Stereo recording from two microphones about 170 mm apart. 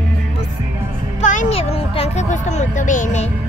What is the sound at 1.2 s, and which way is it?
Speech, 45° left (ahead or behind).